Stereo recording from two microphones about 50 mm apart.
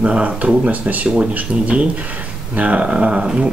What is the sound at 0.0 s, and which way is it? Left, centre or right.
Speech, right.